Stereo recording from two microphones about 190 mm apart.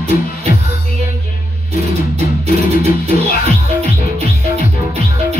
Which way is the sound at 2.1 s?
35° right (ahead or behind).